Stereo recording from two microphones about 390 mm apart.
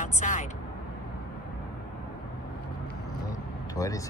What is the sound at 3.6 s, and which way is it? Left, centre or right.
Speech, centre.